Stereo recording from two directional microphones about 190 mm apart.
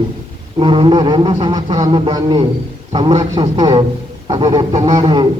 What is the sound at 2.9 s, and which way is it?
Speech, 20° right (ahead or behind).